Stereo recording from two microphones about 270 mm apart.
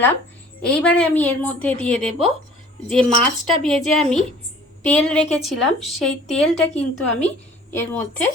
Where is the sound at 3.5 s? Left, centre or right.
Centre.